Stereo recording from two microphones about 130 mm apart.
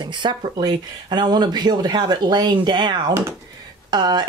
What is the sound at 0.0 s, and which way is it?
Speech, 35° right (ahead or behind).